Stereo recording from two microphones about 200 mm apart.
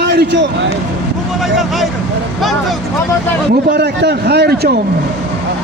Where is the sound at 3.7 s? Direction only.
55° right (ahead or behind).